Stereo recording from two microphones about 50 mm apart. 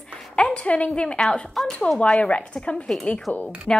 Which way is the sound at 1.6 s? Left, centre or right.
Centre.